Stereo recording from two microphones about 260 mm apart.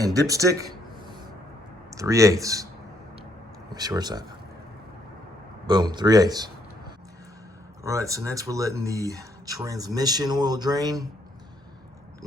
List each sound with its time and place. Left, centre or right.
0.0 s speech: centre
1.9 s speech: centre
3.7 s speech: centre
5.6 s speech: centre
7.9 s speech: centre